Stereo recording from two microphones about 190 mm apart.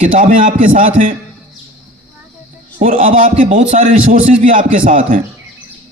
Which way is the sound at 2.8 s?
45° right (ahead or behind).